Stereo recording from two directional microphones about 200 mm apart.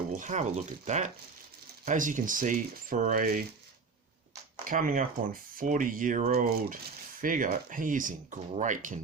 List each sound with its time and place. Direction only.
0.2 s speech: 35° right (ahead or behind)
4.6 s speech: 45° right (ahead or behind)